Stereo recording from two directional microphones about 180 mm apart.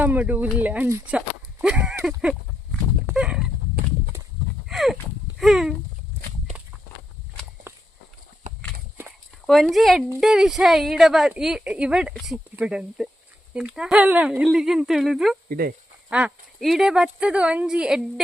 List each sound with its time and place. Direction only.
0.0 s speech: 10° right (ahead or behind)
3.1 s a sound: 5° right (ahead or behind)
4.7 s clip-clop: centre (ahead or behind)
5.4 s a sound: centre (ahead or behind)
9.5 s a woman's voice: centre (ahead or behind)
15.4 s speech: 55° right (ahead or behind)
16.0 s a woman's voice: 5° right (ahead or behind)